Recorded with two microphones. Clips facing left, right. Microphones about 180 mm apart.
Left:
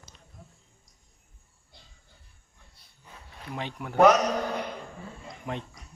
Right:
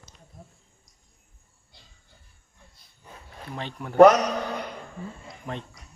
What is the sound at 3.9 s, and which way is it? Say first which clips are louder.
Speech: right 5 dB; 45° right (ahead or behind).